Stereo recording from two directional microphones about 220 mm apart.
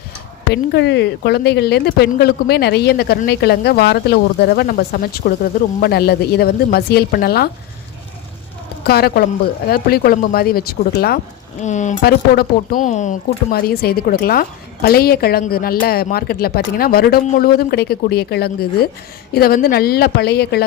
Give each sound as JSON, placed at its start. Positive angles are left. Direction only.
{"t": 0.5, "sound": "speech", "side_deg": 50}
{"t": 8.8, "sound": "speech", "side_deg": 45}
{"t": 11.6, "sound": "speech", "side_deg": 35}